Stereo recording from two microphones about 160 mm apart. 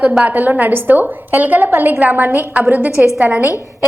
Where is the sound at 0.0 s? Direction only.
5° right (ahead or behind).